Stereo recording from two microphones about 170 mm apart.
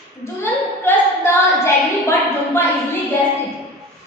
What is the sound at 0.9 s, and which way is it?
A woman's voice, 15° left (ahead or behind).